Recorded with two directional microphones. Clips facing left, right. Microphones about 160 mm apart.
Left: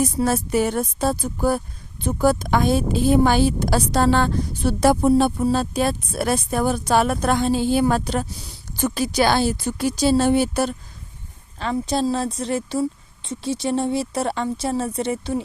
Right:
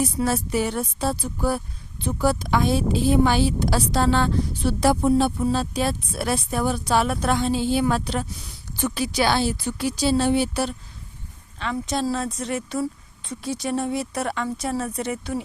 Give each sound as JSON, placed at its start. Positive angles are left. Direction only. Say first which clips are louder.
{"t": 0.0, "sound": "a woman's voice", "louder": "left 3 dB", "side_deg": 45}
{"t": 11.6, "sound": "speech", "louder": "left 3 dB", "side_deg": 35}